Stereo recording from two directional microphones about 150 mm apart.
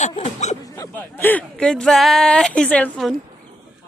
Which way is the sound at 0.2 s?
50° left (ahead or behind).